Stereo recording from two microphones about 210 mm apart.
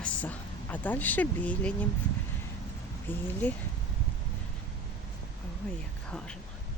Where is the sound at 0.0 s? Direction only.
5° left (ahead or behind).